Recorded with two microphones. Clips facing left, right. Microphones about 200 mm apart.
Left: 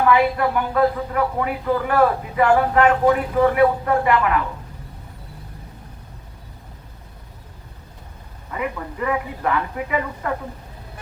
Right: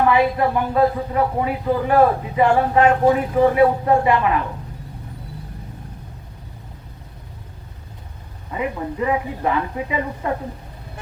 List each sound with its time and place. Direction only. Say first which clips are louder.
0.1 s a man's voice: even; 25° right (ahead or behind)
8.5 s a man's voice: right 3 dB; 20° right (ahead or behind)